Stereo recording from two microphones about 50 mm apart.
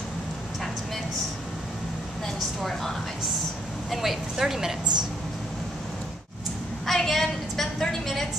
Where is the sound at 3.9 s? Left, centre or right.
Centre.